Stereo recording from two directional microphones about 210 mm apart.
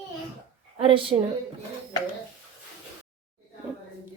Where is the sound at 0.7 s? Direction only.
25° right (ahead or behind).